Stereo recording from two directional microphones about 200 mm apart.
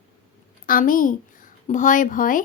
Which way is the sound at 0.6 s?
45° left (ahead or behind).